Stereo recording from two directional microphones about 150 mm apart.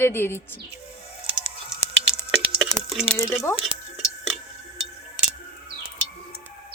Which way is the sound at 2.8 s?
Centre (ahead or behind).